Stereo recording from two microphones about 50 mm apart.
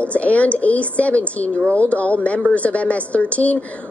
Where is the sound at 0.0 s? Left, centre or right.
Left.